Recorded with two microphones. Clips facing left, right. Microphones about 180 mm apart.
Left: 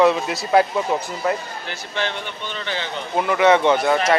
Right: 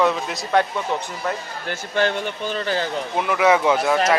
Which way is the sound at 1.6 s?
50° right (ahead or behind).